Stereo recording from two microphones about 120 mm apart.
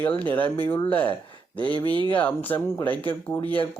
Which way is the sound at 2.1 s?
15° left (ahead or behind).